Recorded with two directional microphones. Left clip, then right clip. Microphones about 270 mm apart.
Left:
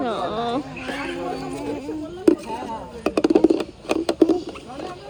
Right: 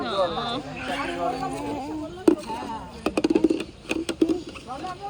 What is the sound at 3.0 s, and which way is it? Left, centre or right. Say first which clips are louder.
Music: left 5 dB; centre.